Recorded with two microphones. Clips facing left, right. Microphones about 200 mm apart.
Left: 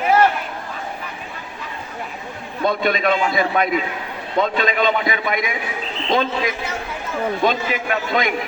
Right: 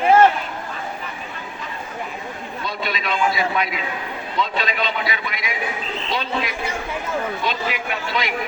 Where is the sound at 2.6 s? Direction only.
50° left (ahead or behind).